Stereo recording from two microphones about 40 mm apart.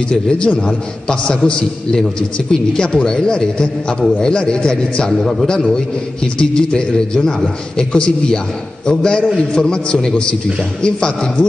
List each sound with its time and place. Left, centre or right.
0.4 s a man's voice: left
5.1 s a man's voice: centre
5.5 s a man's voice: centre
7.2 s a man's voice: centre
7.7 s a man's voice: left